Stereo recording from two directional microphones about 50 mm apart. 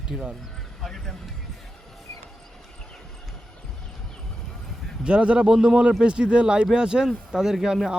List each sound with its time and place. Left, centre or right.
0.1 s speech: centre
5.0 s speech: right